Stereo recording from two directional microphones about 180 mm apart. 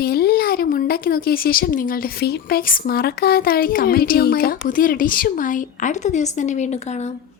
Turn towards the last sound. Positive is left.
turn(degrees=40)  # may be behind; listen again after turning